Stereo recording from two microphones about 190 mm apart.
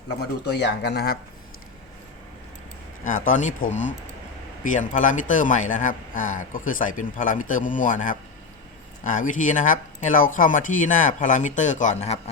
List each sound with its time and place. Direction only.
0.2 s speech: 65° left (ahead or behind)
3.0 s a man's voice: 45° left (ahead or behind)